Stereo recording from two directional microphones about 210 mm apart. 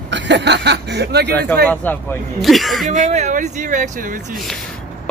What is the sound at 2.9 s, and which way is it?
Speech, 35° right (ahead or behind).